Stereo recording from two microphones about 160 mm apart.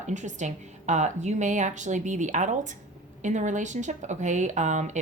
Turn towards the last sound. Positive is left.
turn(degrees=-50)  # may be behind; listen again after turning